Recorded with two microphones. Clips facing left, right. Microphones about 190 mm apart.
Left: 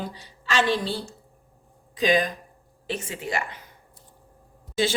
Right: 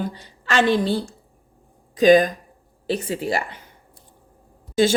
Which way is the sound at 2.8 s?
35° right (ahead or behind).